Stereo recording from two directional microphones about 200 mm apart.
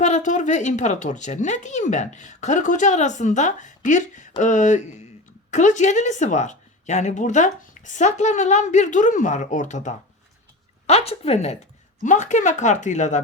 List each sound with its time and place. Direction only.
0.0 s speech: 40° left (ahead or behind)